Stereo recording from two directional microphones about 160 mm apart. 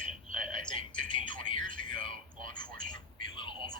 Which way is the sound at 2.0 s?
25° left (ahead or behind).